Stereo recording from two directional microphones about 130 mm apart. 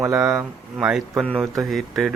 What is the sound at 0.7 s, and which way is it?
Speech, 5° right (ahead or behind).